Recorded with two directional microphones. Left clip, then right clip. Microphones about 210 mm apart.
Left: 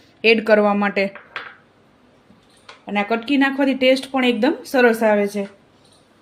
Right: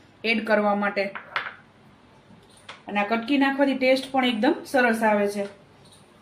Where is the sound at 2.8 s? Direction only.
55° left (ahead or behind).